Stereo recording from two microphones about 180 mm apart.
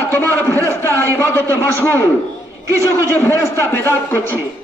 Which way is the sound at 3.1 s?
15° left (ahead or behind).